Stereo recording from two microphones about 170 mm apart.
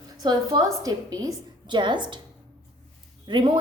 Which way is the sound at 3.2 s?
25° right (ahead or behind).